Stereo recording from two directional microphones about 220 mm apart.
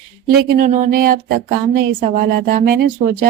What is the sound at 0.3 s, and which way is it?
A woman's voice, 40° right (ahead or behind).